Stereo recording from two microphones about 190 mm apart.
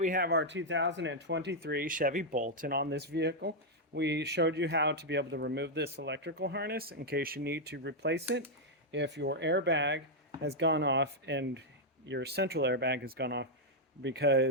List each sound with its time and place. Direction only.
0.0 s speech: 50° right (ahead or behind)